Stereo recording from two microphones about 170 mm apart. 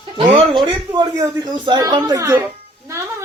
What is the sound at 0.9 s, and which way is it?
A woman's voice, 25° right (ahead or behind).